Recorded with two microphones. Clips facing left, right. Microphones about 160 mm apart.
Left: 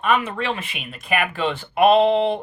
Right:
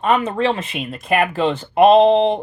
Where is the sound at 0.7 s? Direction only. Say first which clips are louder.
Right 5 dB; 25° right (ahead or behind).